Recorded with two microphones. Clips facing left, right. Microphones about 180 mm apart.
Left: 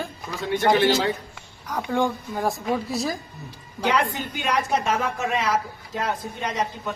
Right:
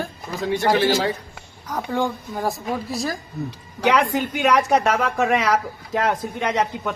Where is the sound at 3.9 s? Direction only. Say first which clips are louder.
Right 5 dB; 75° right (ahead or behind).